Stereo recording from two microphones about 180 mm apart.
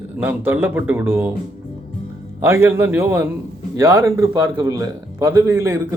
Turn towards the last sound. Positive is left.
turn(degrees=-15)  # may be behind; listen again after turning